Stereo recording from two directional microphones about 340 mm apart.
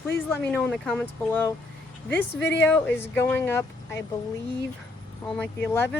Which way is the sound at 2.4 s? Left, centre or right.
Left.